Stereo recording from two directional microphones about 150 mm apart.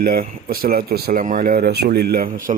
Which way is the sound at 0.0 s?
75° right (ahead or behind).